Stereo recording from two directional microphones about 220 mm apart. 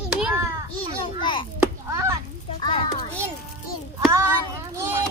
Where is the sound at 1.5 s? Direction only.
10° right (ahead or behind).